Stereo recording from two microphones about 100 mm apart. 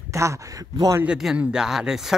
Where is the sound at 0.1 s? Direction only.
30° right (ahead or behind).